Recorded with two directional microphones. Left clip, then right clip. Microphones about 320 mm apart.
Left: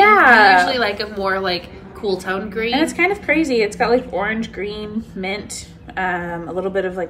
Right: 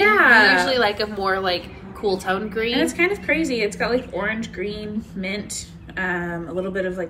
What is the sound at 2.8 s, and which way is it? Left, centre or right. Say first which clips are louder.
A woman's voice: left 3 dB; centre.